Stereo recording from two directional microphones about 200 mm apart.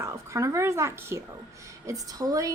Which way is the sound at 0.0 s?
15° right (ahead or behind).